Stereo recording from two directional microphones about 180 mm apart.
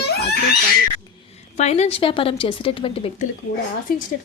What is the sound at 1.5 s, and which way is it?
A woman's voice, 40° left (ahead or behind).